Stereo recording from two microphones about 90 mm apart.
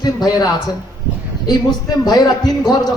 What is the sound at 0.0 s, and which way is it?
Speech, 50° left (ahead or behind).